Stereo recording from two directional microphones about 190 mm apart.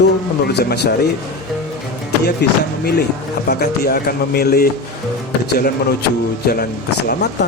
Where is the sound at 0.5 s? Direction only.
60° left (ahead or behind).